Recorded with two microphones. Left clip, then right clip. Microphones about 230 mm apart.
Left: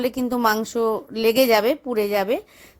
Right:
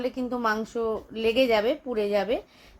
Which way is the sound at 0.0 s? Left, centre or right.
Left.